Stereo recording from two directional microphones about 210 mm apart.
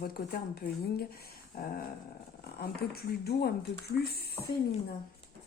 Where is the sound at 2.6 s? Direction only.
50° left (ahead or behind).